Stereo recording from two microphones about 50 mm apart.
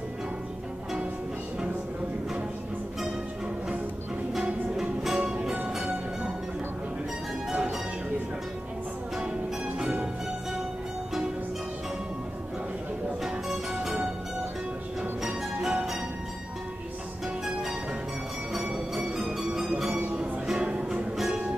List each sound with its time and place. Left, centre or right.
4.4 s music: centre
9.8 s music: centre
13.2 s music: centre
15.2 s music: centre
18.9 s music: centre
19.9 s music: right
20.2 s music: centre